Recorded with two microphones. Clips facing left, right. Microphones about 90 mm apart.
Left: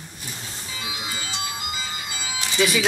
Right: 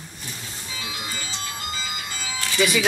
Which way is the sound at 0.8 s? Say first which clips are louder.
Left 1 dB; 10° left (ahead or behind).